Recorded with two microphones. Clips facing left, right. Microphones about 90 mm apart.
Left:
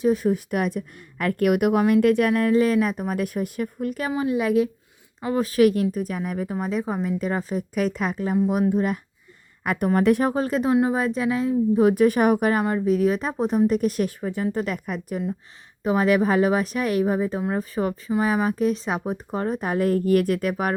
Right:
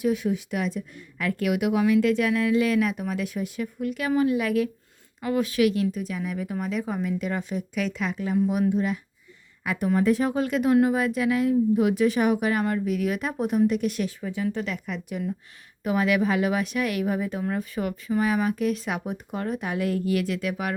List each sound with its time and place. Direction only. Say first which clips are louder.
0.0 s speech: left 4 dB; 40° left (ahead or behind)
4.2 s a woman's voice: left 3 dB; 25° left (ahead or behind); by 10.2 s 60° left (ahead or behind)
10.2 s a woman's voice: left 1 dB; 35° left (ahead or behind)
12.8 s a woman's voice: left 5 dB; 35° left (ahead or behind)